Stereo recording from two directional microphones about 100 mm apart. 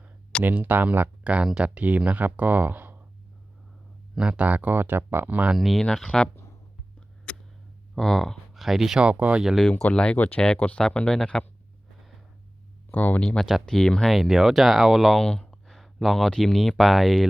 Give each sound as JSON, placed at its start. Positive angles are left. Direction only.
{"t": 0.4, "sound": "speech", "side_deg": -20}
{"t": 4.1, "sound": "speech", "side_deg": -10}
{"t": 5.5, "sound": "speech", "side_deg": 0}
{"t": 7.3, "sound": "a sound", "side_deg": 10}
{"t": 7.9, "sound": "speech", "side_deg": 0}
{"t": 9.6, "sound": "speech", "side_deg": 10}
{"t": 12.9, "sound": "speech", "side_deg": 15}
{"t": 13.2, "sound": "speech", "side_deg": 5}